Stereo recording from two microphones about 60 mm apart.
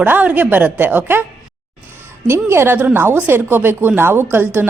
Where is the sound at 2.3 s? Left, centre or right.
Right.